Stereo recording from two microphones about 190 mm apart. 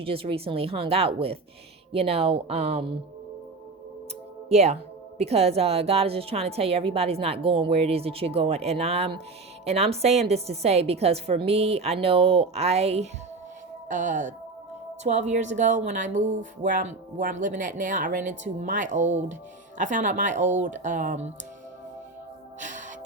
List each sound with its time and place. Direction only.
0.0 s speech: 30° right (ahead or behind)
4.4 s speech: 35° right (ahead or behind)